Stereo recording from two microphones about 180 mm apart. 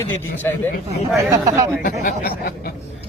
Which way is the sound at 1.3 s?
20° right (ahead or behind).